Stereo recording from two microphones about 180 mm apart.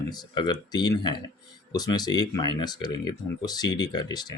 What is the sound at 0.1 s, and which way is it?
Speech, 25° left (ahead or behind).